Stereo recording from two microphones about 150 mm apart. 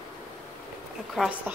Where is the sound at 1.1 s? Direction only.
5° right (ahead or behind).